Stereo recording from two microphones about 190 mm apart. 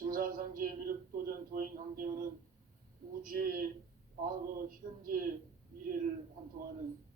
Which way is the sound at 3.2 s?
50° right (ahead or behind).